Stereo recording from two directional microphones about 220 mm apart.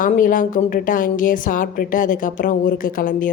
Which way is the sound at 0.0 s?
40° left (ahead or behind).